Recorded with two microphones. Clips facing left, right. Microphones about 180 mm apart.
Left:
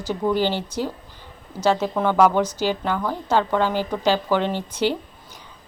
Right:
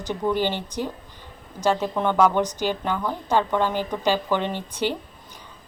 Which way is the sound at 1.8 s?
5° left (ahead or behind).